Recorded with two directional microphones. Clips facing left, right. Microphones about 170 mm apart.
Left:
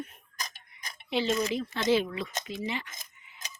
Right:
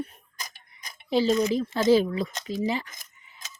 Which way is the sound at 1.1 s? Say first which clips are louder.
Right 6 dB; 35° right (ahead or behind).